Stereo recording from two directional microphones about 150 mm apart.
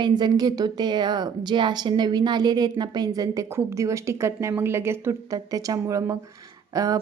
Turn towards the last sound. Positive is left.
turn(degrees=-25)  # may be behind; listen again after turning